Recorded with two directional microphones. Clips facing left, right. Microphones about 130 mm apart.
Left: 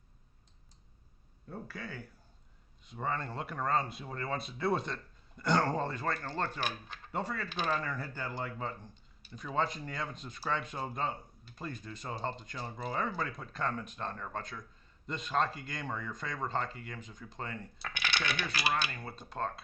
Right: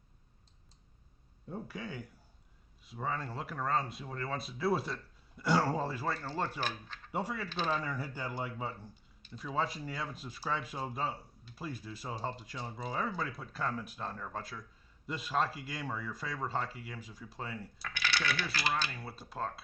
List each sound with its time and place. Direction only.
1.5 s speech: 15° right (ahead or behind)
2.8 s speech: 5° right (ahead or behind)
6.6 s speech: 15° left (ahead or behind)
7.1 s speech: 10° right (ahead or behind)
9.2 s speech: centre (ahead or behind)
17.7 s coin: 20° left (ahead or behind)
18.9 s speech: 5° right (ahead or behind)